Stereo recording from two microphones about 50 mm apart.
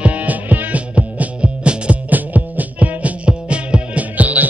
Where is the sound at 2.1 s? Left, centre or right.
Right.